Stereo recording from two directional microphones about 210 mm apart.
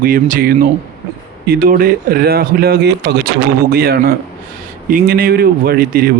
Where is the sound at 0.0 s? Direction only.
40° right (ahead or behind).